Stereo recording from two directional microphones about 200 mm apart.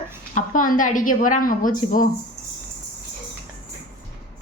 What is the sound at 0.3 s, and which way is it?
A woman's voice, 40° left (ahead or behind).